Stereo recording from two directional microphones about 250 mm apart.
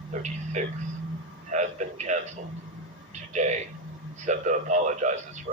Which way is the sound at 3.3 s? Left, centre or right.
Right.